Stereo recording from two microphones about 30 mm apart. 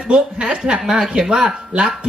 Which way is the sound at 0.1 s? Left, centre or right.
Right.